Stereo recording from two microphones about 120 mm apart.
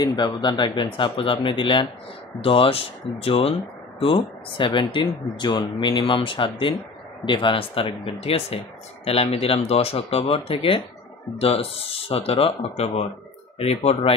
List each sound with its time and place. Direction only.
0.0 s speech: 40° left (ahead or behind); by 14.1 s 55° left (ahead or behind)